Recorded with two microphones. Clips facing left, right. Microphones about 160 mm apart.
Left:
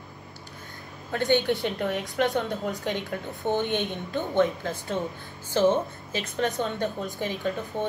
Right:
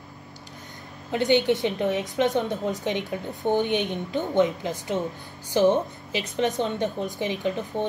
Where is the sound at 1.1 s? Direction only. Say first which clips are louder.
Right 3 dB; 15° right (ahead or behind).